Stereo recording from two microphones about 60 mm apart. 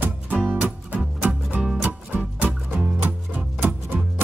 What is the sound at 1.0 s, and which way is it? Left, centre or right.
Music, centre.